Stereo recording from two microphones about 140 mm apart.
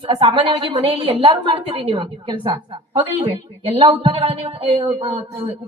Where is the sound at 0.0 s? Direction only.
40° right (ahead or behind).